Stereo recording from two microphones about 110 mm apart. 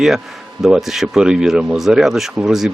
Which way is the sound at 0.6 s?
5° right (ahead or behind).